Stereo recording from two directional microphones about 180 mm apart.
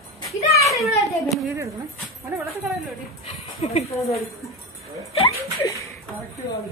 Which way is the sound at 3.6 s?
35° left (ahead or behind).